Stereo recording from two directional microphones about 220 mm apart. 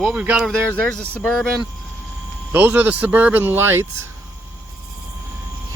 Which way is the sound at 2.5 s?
10° right (ahead or behind).